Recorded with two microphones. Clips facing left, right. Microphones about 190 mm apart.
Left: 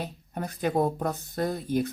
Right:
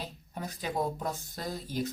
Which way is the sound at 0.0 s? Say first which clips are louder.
Left 5 dB; 55° left (ahead or behind).